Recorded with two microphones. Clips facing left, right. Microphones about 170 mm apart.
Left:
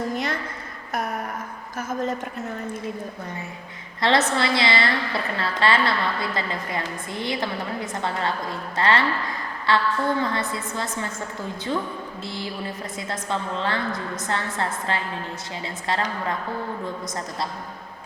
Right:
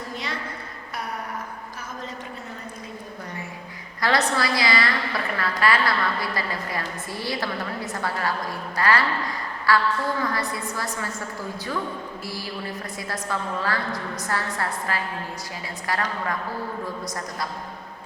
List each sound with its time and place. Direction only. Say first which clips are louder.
1.9 s a sound: left 11 dB; 50° left (ahead or behind)
4.0 s a woman's voice: left 2 dB; 25° left (ahead or behind)
12.2 s a woman's voice: left 4 dB; 20° left (ahead or behind)